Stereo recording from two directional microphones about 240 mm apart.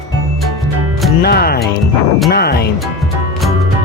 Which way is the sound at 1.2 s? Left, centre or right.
Left.